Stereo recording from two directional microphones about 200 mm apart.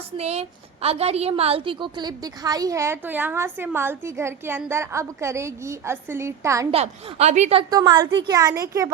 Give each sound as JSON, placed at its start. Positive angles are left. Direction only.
{"t": 0.2, "sound": "a woman's voice", "side_deg": -30}
{"t": 6.7, "sound": "a woman's voice", "side_deg": -30}
{"t": 7.7, "sound": "a woman's voice", "side_deg": -20}